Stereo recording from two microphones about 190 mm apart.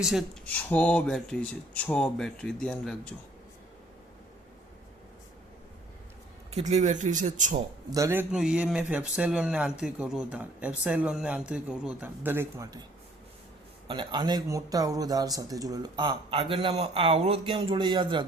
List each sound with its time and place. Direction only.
0.0 s speech: centre (ahead or behind)
0.5 s speech: 10° left (ahead or behind)
6.5 s speech: 35° right (ahead or behind)
7.9 s a man's voice: 15° right (ahead or behind)
13.8 s a man's voice: 25° right (ahead or behind)